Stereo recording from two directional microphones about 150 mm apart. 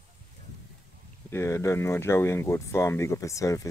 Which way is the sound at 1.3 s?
20° left (ahead or behind).